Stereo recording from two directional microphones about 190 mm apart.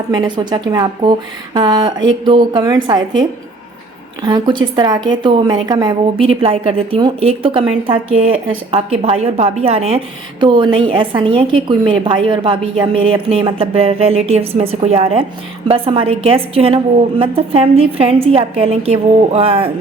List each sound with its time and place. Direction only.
0.1 s a woman's voice: 20° right (ahead or behind)